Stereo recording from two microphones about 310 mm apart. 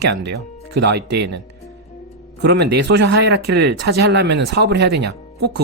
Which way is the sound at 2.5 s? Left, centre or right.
Right.